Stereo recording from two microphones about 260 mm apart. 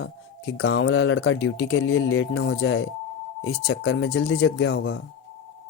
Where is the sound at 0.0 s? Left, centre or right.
Left.